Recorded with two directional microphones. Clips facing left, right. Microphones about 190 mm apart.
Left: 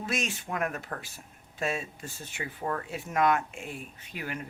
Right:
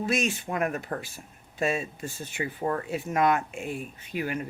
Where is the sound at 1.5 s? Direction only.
5° right (ahead or behind).